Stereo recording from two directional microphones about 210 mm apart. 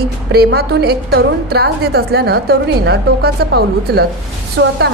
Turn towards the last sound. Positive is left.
turn(degrees=-55)  # may be behind; listen again after turning